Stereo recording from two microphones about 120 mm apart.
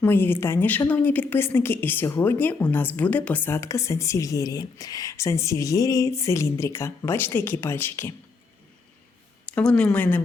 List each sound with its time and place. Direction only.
0.0 s a woman's voice: 20° left (ahead or behind)
9.6 s speech: 10° left (ahead or behind)